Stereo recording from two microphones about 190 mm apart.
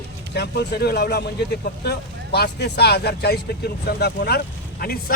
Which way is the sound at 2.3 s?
60° left (ahead or behind).